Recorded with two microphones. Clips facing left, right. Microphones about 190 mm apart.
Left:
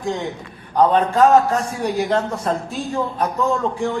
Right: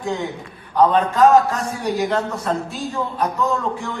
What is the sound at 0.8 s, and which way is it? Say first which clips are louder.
A man's voice: even; 35° left (ahead or behind).